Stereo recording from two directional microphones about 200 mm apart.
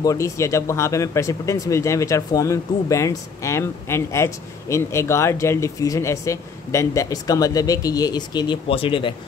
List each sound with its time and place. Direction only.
0.0 s speech: 15° left (ahead or behind)